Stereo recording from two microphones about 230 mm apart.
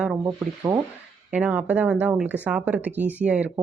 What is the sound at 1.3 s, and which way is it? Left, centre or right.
Speech, centre.